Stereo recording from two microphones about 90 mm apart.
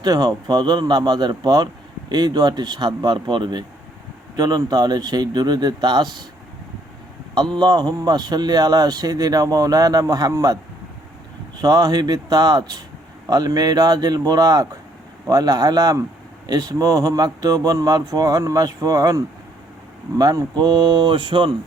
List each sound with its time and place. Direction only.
0.0 s speech: 45° right (ahead or behind)
7.5 s speech: 50° right (ahead or behind)
11.6 s speech: 40° right (ahead or behind); by 21.5 s 65° right (ahead or behind)